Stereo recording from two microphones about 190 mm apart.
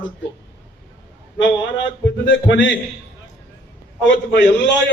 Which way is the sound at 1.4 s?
75° left (ahead or behind).